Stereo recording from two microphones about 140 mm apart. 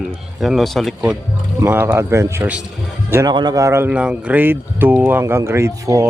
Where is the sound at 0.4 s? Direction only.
Centre (ahead or behind).